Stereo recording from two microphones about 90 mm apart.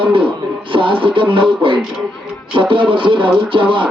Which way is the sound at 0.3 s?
65° right (ahead or behind).